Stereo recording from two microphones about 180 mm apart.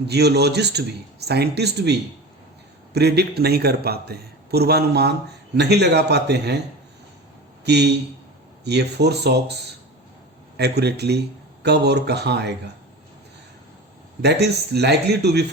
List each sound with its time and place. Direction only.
0.1 s a man's voice: 65° right (ahead or behind)
7.6 s a man's voice: 65° right (ahead or behind)
10.6 s a man's voice: 65° right (ahead or behind)
14.2 s a man's voice: 65° right (ahead or behind)